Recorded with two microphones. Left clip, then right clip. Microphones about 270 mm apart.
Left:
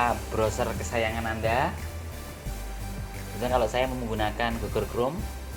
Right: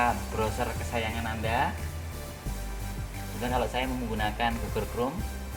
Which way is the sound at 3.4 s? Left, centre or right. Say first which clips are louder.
Left 4 dB; left.